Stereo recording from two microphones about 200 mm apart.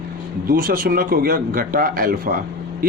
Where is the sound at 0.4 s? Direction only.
45° right (ahead or behind).